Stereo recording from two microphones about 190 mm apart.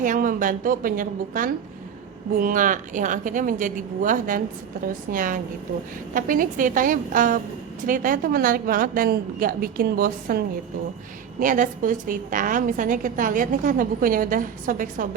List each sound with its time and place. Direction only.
0.0 s a woman's voice: 45° right (ahead or behind)